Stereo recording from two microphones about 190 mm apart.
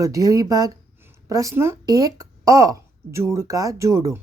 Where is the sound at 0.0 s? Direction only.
15° right (ahead or behind).